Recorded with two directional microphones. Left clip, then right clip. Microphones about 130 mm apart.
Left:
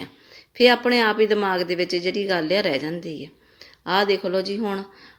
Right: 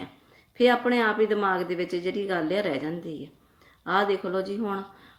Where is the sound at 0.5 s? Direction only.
25° left (ahead or behind).